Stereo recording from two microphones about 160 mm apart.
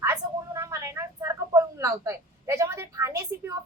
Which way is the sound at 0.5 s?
15° right (ahead or behind).